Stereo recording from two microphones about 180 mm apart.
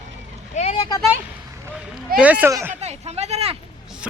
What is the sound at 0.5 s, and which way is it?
Speech, 35° left (ahead or behind).